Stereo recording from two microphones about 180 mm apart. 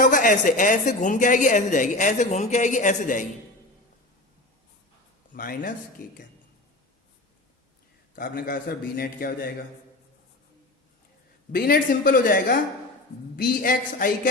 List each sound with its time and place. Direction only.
0.0 s a woman's voice: 45° left (ahead or behind)
5.3 s speech: 50° left (ahead or behind)
8.1 s a woman's voice: 50° left (ahead or behind)
11.5 s a woman's voice: 55° left (ahead or behind)